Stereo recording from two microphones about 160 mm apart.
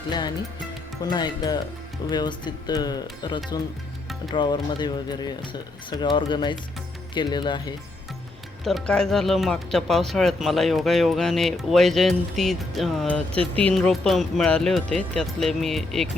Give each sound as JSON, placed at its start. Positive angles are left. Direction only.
{"t": 1.0, "sound": "speech", "side_deg": 25}
{"t": 8.6, "sound": "speech", "side_deg": 0}